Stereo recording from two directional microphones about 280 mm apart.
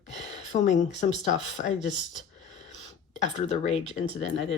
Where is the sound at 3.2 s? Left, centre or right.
Left.